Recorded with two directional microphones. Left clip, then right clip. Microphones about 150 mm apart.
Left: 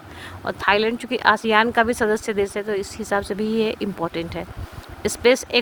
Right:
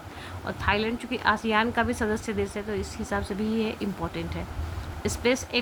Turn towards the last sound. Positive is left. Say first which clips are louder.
# left 8 dB
turn(degrees=65)  # may be behind; listen again after turning